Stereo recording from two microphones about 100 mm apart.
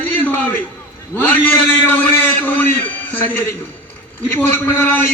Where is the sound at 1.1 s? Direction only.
20° left (ahead or behind).